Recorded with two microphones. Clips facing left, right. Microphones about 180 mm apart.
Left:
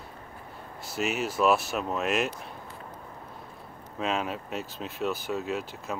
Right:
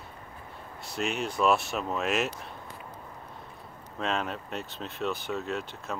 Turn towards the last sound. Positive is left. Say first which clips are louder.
# left 2 dB
turn(degrees=0)  # may be behind; listen again after turning